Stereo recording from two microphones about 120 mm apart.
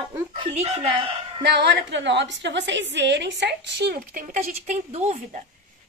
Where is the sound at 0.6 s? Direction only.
55° right (ahead or behind).